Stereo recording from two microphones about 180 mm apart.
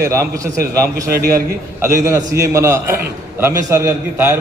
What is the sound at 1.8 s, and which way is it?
A man's voice, 15° right (ahead or behind).